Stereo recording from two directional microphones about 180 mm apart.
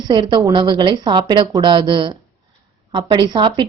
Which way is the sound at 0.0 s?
20° right (ahead or behind).